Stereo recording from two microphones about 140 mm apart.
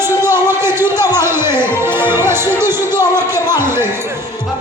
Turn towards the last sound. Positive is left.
turn(degrees=-15)  # may be behind; listen again after turning